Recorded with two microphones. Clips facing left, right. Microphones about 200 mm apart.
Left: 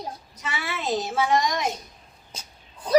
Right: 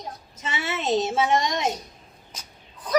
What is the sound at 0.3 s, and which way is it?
A child's voice, 25° right (ahead or behind).